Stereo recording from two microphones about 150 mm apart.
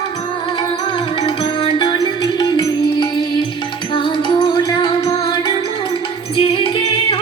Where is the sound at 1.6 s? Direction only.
35° left (ahead or behind).